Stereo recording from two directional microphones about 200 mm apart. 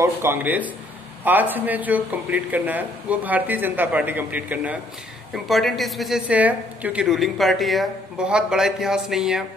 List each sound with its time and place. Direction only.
0.0 s a woman's voice: 10° right (ahead or behind)